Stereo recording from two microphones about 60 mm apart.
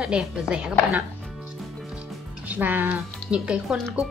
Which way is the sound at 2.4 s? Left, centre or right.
Right.